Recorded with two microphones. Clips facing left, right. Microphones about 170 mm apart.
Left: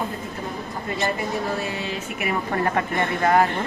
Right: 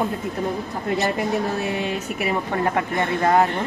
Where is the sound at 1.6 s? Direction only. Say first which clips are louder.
Right 4 dB; 65° right (ahead or behind).